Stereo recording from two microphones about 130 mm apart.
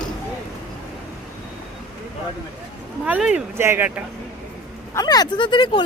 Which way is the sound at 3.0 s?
10° right (ahead or behind).